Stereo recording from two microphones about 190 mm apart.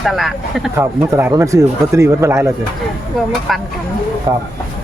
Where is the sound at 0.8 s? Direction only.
15° right (ahead or behind).